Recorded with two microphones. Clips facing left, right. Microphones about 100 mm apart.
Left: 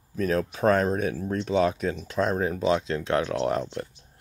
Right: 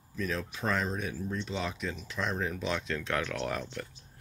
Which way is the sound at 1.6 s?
45° left (ahead or behind).